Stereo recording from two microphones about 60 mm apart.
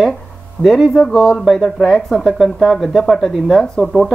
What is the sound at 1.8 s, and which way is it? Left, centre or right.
Speech, centre.